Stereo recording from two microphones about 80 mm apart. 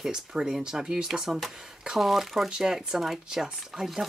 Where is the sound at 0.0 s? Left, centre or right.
Centre.